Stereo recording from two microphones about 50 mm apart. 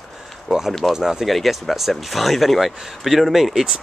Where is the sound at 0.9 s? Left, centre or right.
Centre.